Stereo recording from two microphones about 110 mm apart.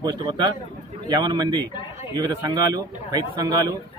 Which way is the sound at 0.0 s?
40° right (ahead or behind).